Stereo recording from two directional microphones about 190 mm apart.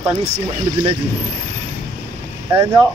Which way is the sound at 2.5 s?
15° right (ahead or behind).